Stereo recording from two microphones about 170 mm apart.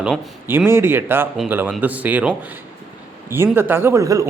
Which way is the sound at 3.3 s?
15° right (ahead or behind).